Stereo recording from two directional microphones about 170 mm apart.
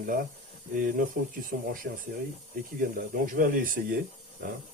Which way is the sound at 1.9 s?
70° right (ahead or behind).